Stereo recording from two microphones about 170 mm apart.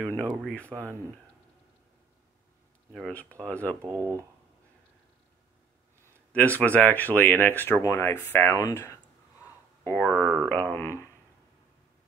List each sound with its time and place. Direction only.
0.0 s speech: 15° right (ahead or behind)
0.4 s speech: 5° left (ahead or behind)
2.9 s speech: 5° left (ahead or behind)
3.8 s speech: 20° right (ahead or behind)
6.3 s speech: 10° left (ahead or behind)